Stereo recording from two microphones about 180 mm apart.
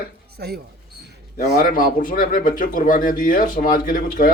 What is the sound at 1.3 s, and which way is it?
A man's voice, 50° left (ahead or behind).